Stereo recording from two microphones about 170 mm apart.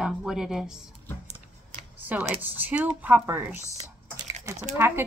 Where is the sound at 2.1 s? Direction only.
10° right (ahead or behind).